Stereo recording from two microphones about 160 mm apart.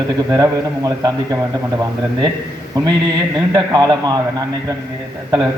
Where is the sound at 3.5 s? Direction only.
25° right (ahead or behind).